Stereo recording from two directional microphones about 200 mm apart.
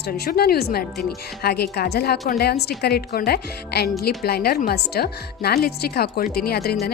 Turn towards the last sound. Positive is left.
turn(degrees=50)  # may be behind; listen again after turning